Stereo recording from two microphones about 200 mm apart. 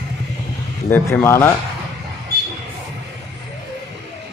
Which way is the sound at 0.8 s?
10° left (ahead or behind).